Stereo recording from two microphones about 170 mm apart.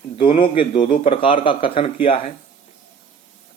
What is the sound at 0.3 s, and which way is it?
Speech, 30° left (ahead or behind).